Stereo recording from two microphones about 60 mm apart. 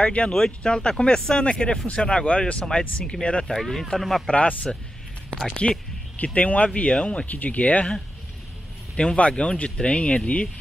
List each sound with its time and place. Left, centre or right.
0.0 s speech: centre
3.5 s speech: centre
4.3 s speech: left
7.2 s speech: left
8.9 s speech: centre